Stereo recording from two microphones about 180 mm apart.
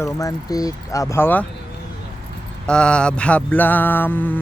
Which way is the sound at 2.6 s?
5° left (ahead or behind).